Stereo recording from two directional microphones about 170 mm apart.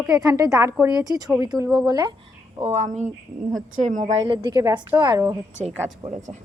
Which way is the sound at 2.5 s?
40° right (ahead or behind).